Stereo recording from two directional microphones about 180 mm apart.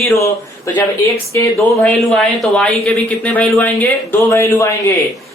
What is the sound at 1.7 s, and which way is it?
Speech, 5° left (ahead or behind).